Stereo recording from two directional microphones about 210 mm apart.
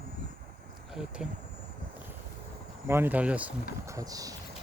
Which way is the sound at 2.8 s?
10° right (ahead or behind).